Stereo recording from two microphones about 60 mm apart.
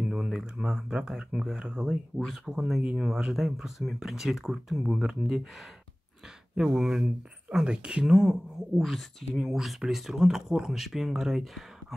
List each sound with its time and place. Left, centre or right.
0.1 s speech: centre
1.9 s speech: centre
6.5 s speech: centre